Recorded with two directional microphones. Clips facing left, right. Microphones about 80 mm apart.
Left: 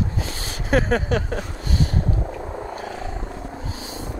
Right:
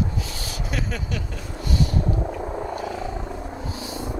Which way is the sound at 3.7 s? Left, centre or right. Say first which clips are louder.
Right 2 dB; left.